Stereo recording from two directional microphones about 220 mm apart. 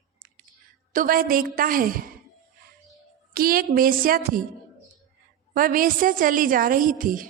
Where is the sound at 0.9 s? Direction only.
40° right (ahead or behind).